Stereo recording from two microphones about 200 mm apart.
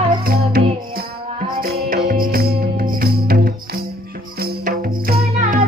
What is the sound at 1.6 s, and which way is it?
Music, 45° right (ahead or behind).